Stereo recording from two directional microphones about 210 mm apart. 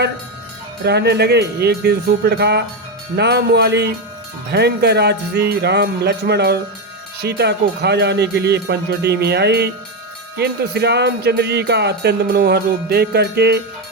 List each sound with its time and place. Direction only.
0.9 s speech: 50° right (ahead or behind)